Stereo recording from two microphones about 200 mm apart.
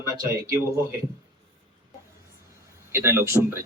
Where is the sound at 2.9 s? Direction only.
15° right (ahead or behind).